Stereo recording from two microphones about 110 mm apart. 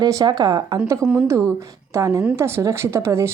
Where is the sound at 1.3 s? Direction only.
30° right (ahead or behind).